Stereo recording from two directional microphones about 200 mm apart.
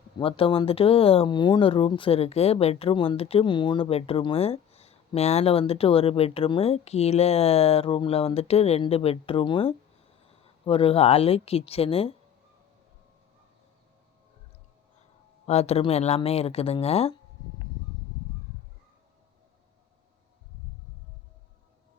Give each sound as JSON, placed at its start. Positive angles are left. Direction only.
{"t": 0.2, "sound": "speech", "side_deg": 25}
{"t": 15.4, "sound": "speech", "side_deg": 30}